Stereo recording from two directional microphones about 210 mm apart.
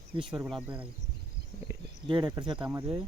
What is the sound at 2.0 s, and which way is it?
Speech, 20° right (ahead or behind).